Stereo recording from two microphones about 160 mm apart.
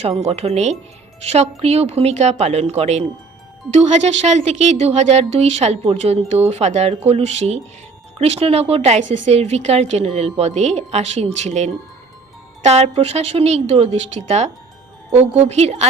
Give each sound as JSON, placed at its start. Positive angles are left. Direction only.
{"t": 0.0, "sound": "speech", "side_deg": -40}